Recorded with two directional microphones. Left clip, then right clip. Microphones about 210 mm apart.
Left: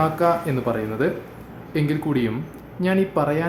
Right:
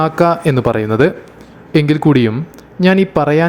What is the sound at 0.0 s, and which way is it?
Speech, 40° right (ahead or behind).